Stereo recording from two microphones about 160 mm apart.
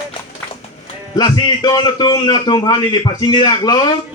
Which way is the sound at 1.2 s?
25° left (ahead or behind).